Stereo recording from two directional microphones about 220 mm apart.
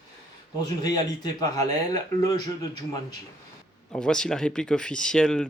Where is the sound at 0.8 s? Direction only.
15° left (ahead or behind).